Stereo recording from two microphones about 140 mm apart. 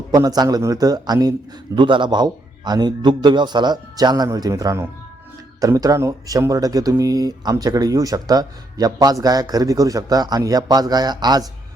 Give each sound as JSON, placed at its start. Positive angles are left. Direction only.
{"t": 0.1, "sound": "a man's voice", "side_deg": -25}